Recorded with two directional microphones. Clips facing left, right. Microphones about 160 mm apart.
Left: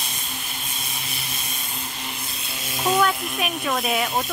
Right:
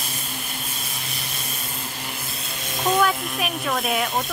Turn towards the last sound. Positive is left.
turn(degrees=0)  # may be behind; listen again after turning